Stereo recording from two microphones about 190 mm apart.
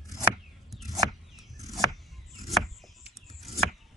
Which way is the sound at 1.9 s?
Centre (ahead or behind).